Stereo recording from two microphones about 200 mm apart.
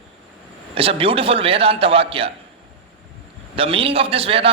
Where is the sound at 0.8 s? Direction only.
30° right (ahead or behind).